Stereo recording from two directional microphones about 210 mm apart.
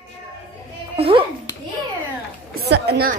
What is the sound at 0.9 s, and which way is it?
Speech, 25° right (ahead or behind).